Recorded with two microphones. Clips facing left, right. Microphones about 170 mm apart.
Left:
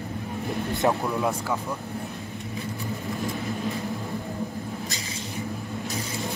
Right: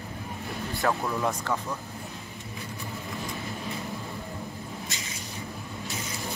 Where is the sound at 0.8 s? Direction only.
20° left (ahead or behind).